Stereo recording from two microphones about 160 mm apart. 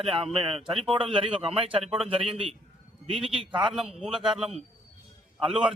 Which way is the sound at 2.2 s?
35° right (ahead or behind).